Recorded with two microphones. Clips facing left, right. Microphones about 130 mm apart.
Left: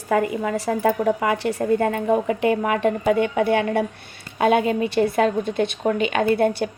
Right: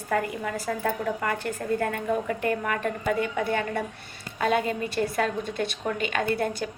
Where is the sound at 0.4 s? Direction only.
80° left.